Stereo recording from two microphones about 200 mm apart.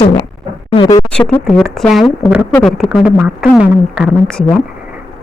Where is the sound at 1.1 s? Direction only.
5° left (ahead or behind).